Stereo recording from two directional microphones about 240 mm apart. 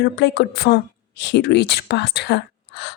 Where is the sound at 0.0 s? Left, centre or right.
Left.